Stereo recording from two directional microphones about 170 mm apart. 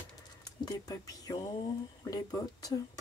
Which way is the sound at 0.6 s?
20° left (ahead or behind).